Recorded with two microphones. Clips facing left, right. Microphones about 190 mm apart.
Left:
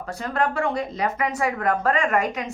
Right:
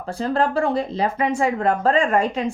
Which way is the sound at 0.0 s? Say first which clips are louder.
Right 4 dB; 30° right (ahead or behind).